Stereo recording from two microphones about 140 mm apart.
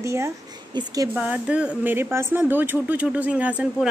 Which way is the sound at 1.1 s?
10° right (ahead or behind).